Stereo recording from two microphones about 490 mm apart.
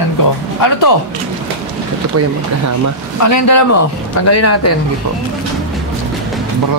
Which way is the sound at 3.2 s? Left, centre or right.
Left.